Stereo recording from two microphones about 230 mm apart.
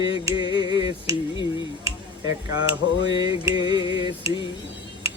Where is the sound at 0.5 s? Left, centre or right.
Centre.